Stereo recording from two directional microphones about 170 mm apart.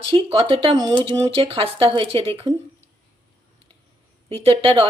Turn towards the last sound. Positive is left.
turn(degrees=-30)  # may be behind; listen again after turning